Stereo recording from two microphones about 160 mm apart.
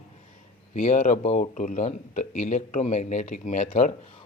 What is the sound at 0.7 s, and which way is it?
Speech, 50° left (ahead or behind).